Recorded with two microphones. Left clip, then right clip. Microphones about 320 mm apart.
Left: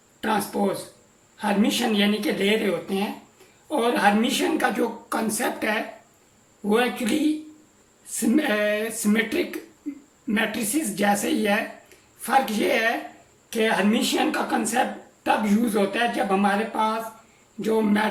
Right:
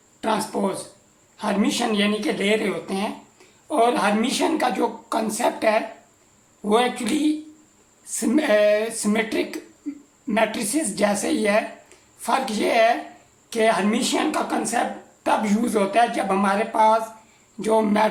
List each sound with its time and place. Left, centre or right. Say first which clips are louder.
0.2 s a sound: right 1 dB; centre
1.4 s speech: even; centre
8.1 s speech: right 4 dB; centre